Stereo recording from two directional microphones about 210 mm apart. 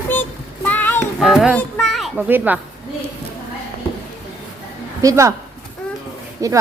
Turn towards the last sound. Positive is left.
turn(degrees=-15)  # may be behind; listen again after turning